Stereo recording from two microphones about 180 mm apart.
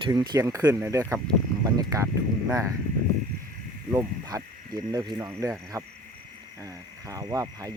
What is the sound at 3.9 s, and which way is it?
Speech, 20° right (ahead or behind).